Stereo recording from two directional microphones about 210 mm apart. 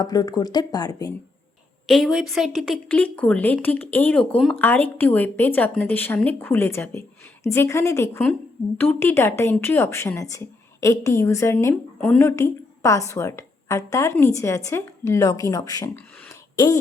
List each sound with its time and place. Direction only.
0.0 s speech: 20° left (ahead or behind)
1.9 s a woman's voice: centre (ahead or behind)
12.2 s a woman's voice: 15° left (ahead or behind)
16.2 s a sound: 15° left (ahead or behind)